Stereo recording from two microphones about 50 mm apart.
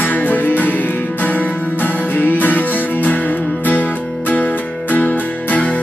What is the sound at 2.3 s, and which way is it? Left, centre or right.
Music, left.